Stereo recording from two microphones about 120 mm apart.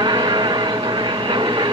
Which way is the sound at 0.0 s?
35° right (ahead or behind).